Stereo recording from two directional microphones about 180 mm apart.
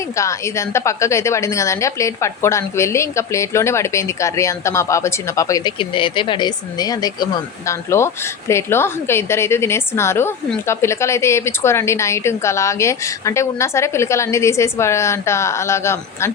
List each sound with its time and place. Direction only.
0.2 s a woman's voice: 15° left (ahead or behind)